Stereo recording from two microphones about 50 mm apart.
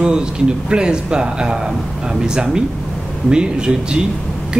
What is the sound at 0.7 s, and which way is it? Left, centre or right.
Speech, centre.